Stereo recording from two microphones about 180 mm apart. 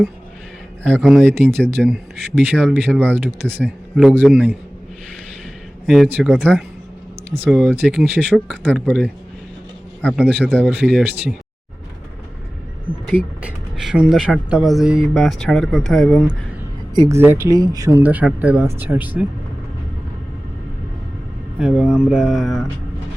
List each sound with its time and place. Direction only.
0.9 s speech: centre (ahead or behind)
5.8 s speech: centre (ahead or behind)
7.7 s speech: centre (ahead or behind)
13.1 s speech: 5° right (ahead or behind)
16.9 s speech: 20° right (ahead or behind)
18.0 s speech: 10° right (ahead or behind)
21.6 s speech: 5° right (ahead or behind)